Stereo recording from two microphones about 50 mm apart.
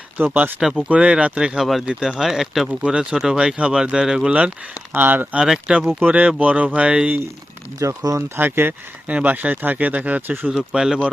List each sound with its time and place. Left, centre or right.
0.2 s speech: right
0.8 s speech: right
1.5 s speech: centre
1.8 s speech: centre
2.8 s speech: centre
4.9 s speech: right
5.5 s speech: centre
7.8 s speech: right
8.4 s speech: right
9.0 s speech: right
10.5 s speech: centre
10.8 s speech: centre